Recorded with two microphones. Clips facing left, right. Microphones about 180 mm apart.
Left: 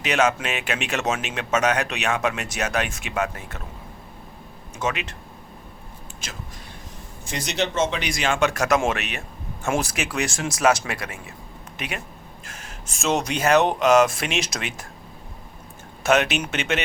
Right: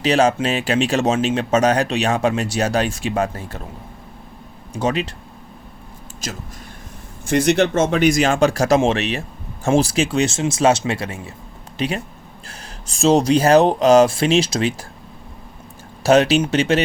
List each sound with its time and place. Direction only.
0.0 s speech: 30° right (ahead or behind)
4.7 s speech: 35° right (ahead or behind)
6.2 s speech: 40° right (ahead or behind)
7.3 s speech: 55° right (ahead or behind); by 14.8 s 30° right (ahead or behind)
16.0 s speech: 30° right (ahead or behind)